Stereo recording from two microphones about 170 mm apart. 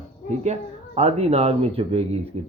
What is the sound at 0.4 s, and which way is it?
Speech, 40° right (ahead or behind).